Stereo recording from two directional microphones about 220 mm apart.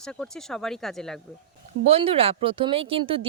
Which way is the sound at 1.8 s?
25° right (ahead or behind).